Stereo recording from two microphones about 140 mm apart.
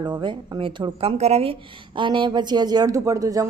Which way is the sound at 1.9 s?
35° right (ahead or behind).